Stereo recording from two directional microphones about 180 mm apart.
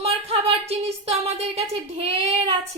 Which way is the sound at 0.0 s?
35° right (ahead or behind).